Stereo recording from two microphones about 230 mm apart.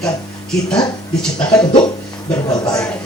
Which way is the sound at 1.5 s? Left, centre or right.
Centre.